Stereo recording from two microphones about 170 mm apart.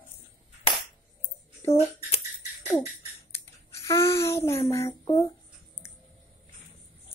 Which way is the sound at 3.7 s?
15° left (ahead or behind).